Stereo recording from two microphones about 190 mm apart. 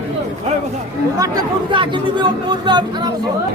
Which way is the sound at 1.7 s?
25° right (ahead or behind).